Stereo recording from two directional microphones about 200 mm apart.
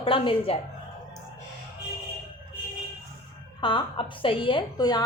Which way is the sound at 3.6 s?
25° left (ahead or behind).